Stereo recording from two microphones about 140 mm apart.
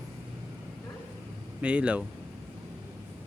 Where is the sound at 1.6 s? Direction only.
10° right (ahead or behind).